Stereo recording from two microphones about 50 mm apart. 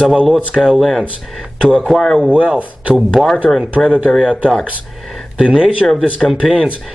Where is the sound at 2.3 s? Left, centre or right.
Right.